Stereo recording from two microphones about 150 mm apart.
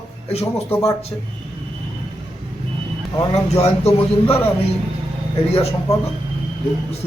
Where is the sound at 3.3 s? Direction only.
45° left (ahead or behind).